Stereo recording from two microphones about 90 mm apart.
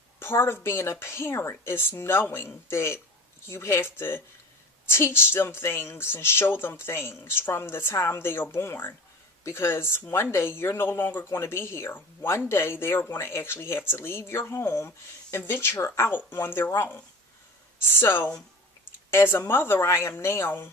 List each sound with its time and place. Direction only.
0.2 s speech: 25° left (ahead or behind)